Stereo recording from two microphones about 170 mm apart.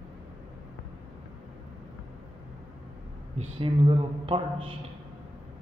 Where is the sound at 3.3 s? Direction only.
30° right (ahead or behind).